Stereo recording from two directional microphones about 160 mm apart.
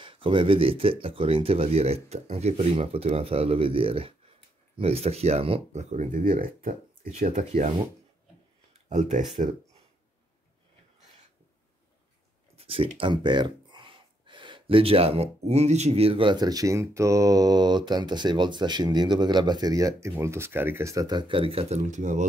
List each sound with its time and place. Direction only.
0.0 s speech: 30° right (ahead or behind)
8.8 s speech: 50° right (ahead or behind)
12.5 s speech: 35° right (ahead or behind)